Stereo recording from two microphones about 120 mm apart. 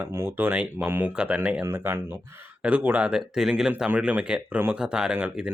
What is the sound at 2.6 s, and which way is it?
Speech, 10° right (ahead or behind).